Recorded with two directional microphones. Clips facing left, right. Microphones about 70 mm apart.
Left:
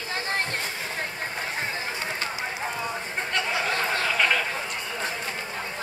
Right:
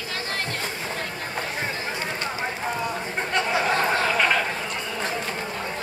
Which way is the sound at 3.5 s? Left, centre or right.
Right.